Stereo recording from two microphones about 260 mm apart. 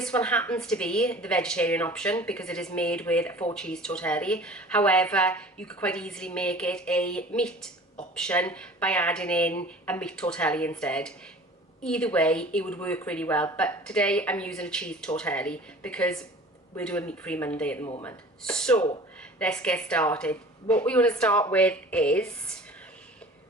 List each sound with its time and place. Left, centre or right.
0.0 s speech: centre
17.8 s speech: centre
18.4 s speech: centre